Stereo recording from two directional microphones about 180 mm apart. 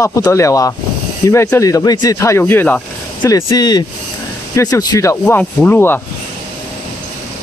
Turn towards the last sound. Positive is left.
turn(degrees=10)  # may be behind; listen again after turning